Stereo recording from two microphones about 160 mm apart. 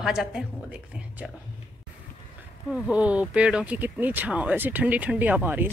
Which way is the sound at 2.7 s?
10° right (ahead or behind).